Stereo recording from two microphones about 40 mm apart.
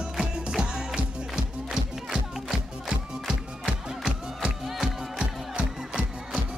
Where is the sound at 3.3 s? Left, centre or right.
Centre.